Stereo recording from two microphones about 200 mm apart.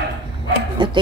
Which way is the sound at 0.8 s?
25° right (ahead or behind).